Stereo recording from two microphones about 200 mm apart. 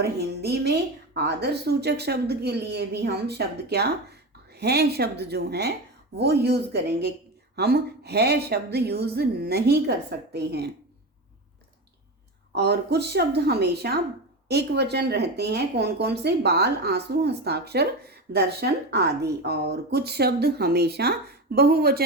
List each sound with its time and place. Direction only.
0.0 s a woman's voice: 55° right (ahead or behind)
12.5 s a woman's voice: 55° right (ahead or behind)